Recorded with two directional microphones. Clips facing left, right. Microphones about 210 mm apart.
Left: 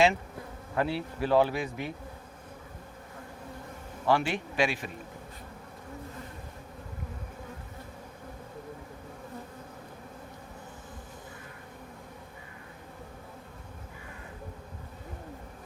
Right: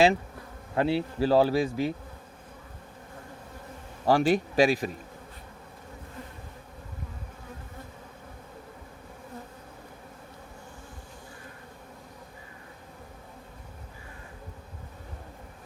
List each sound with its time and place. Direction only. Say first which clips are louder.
0.8 s speech: right 4 dB; 30° right (ahead or behind)
4.0 s speech: right 5 dB; 35° right (ahead or behind)